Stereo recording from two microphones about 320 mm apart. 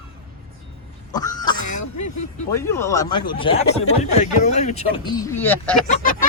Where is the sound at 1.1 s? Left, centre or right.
Centre.